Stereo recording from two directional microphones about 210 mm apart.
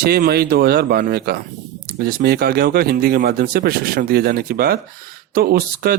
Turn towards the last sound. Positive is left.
turn(degrees=-45)  # may be behind; listen again after turning